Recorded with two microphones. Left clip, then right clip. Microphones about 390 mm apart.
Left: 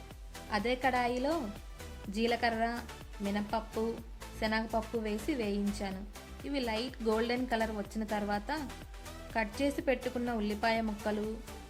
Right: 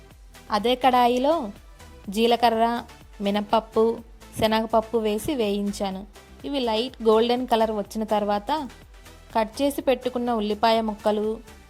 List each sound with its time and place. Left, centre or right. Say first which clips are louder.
0.5 s a woman's voice: right 11 dB; centre